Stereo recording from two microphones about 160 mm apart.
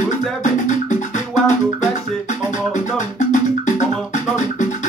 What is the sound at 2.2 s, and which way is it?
Music, 50° left (ahead or behind).